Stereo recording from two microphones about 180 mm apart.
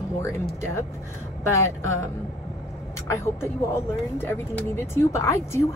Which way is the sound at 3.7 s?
15° left (ahead or behind).